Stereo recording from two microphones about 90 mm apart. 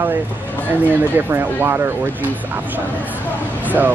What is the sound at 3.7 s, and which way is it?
Speech, 20° right (ahead or behind).